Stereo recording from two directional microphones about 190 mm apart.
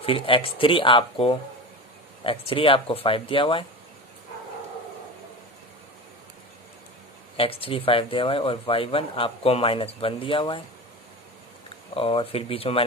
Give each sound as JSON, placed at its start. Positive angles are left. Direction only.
{"t": 0.0, "sound": "speech", "side_deg": 30}
{"t": 7.3, "sound": "speech", "side_deg": 30}
{"t": 11.9, "sound": "speech", "side_deg": 30}